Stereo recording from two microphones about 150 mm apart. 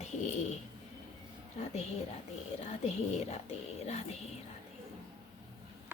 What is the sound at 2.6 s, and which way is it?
Speech, 50° left (ahead or behind).